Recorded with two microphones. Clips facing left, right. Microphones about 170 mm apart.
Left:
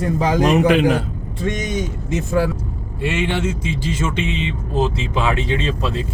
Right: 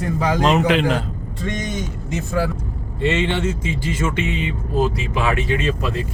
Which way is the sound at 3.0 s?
10° left (ahead or behind).